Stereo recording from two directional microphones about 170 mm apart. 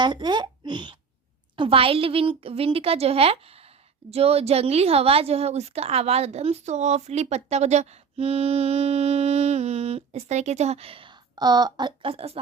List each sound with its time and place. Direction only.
0.0 s a woman's voice: 25° right (ahead or behind)